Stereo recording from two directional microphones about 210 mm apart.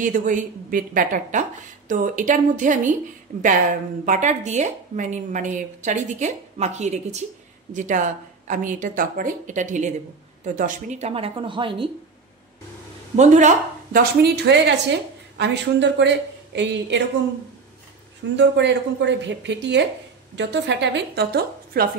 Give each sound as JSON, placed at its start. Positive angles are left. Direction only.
{"t": 0.0, "sound": "a woman's voice", "side_deg": -40}
{"t": 13.1, "sound": "speech", "side_deg": -35}
{"t": 14.2, "sound": "a woman's voice", "side_deg": -55}
{"t": 18.3, "sound": "a woman's voice", "side_deg": -55}